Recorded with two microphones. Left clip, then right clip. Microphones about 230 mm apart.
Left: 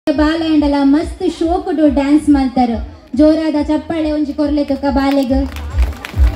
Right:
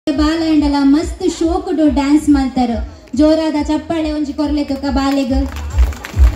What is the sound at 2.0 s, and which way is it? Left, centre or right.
A woman's voice, right.